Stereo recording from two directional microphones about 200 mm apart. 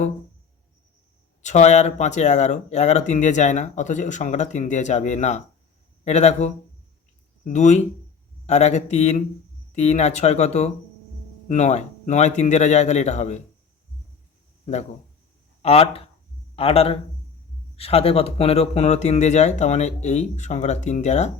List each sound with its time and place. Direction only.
1.4 s speech: 35° left (ahead or behind)
14.6 s a sound: 35° left (ahead or behind)
15.6 s a man's voice: 30° left (ahead or behind)